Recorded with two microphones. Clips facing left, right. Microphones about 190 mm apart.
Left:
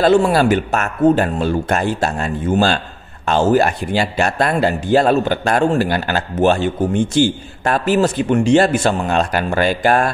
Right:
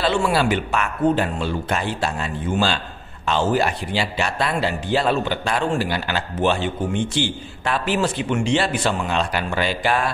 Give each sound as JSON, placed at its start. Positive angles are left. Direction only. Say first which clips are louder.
{"t": 0.0, "sound": "speech", "louder": "left 7 dB", "side_deg": 45}